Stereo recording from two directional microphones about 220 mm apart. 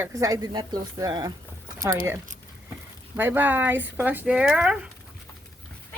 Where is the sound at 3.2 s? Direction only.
10° right (ahead or behind).